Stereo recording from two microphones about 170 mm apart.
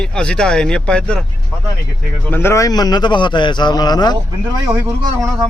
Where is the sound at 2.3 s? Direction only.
15° left (ahead or behind).